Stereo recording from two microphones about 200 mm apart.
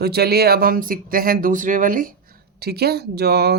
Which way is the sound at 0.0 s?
50° right (ahead or behind).